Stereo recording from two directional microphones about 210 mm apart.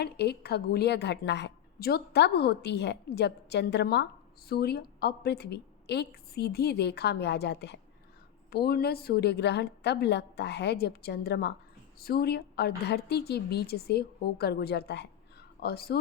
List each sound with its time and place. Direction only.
0.0 s a woman's voice: 50° left (ahead or behind)